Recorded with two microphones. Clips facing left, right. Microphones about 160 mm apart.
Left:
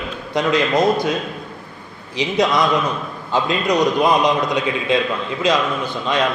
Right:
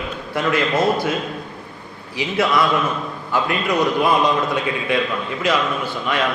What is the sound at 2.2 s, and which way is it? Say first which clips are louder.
A man's voice: left 1 dB; 20° left (ahead or behind).